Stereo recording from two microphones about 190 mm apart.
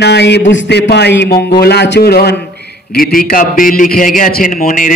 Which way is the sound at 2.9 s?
50° left (ahead or behind).